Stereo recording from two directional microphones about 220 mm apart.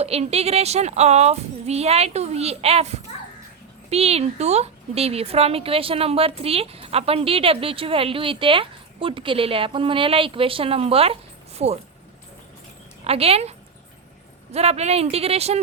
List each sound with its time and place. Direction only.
0.0 s speech: 30° right (ahead or behind)
13.1 s speech: 25° right (ahead or behind)